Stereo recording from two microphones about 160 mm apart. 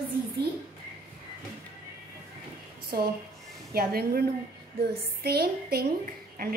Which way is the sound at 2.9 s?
70° right (ahead or behind).